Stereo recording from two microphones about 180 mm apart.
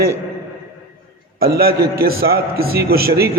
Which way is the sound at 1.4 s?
60° right (ahead or behind).